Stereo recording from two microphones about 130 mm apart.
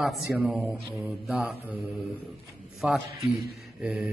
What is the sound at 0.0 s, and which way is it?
Speech, centre (ahead or behind).